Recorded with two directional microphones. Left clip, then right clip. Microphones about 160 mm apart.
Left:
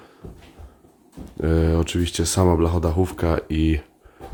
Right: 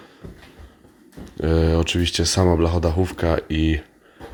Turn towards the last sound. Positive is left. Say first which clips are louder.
# right 1 dB
turn(degrees=25)  # may be behind; listen again after turning